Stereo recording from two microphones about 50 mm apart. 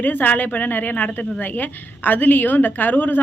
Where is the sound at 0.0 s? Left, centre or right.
Left.